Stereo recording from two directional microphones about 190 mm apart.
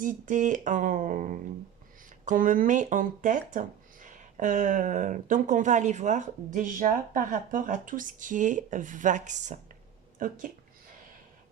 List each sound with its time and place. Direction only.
0.0 s speech: 40° right (ahead or behind)